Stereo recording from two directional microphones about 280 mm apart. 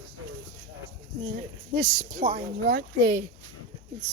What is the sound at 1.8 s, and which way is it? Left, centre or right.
Speech, centre.